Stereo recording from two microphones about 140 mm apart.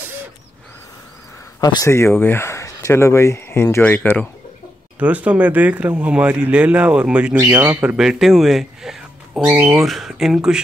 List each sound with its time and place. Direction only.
1.6 s speech: 25° left (ahead or behind); by 4.3 s 10° left (ahead or behind)
4.9 s speech: 10° right (ahead or behind)